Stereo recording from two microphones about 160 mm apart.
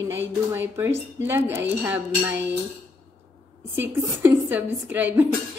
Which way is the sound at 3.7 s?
15° right (ahead or behind).